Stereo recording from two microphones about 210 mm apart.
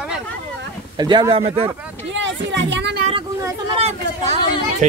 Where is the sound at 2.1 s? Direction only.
60° right (ahead or behind).